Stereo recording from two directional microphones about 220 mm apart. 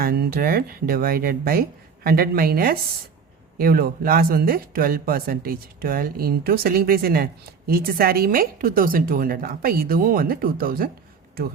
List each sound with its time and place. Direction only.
0.0 s speech: 40° right (ahead or behind)